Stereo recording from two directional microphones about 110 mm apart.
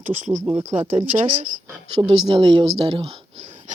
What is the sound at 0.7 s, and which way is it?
Speech, 90° right.